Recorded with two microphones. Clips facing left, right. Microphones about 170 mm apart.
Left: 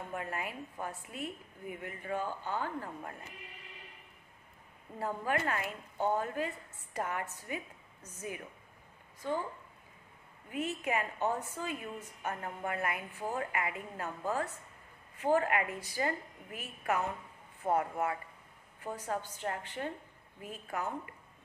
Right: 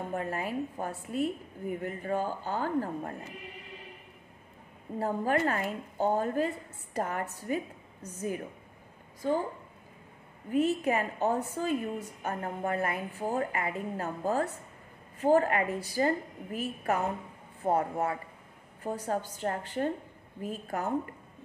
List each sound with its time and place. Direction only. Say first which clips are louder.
0.0 s a woman's voice: right 6 dB; 35° right (ahead or behind)
4.9 s a woman's voice: right 6 dB; 35° right (ahead or behind)
10.5 s a woman's voice: right 8 dB; 35° right (ahead or behind)